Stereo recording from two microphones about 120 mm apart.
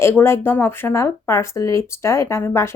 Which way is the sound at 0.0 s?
20° left (ahead or behind).